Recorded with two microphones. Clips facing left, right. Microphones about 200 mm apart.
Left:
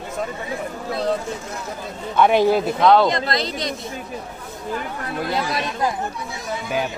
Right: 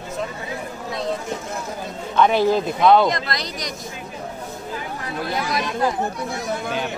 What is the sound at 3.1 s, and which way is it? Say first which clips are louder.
Speech: left 3 dB; 25° left (ahead or behind).